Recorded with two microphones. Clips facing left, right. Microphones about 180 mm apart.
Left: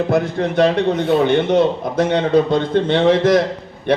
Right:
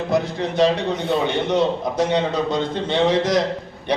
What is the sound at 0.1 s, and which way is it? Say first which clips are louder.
A man's voice: left 4 dB; 55° left (ahead or behind).